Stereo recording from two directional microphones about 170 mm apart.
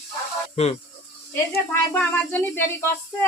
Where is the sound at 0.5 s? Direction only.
40° left (ahead or behind).